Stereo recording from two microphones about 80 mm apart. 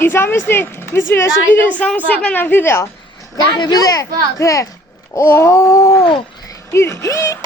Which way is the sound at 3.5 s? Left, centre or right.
Left.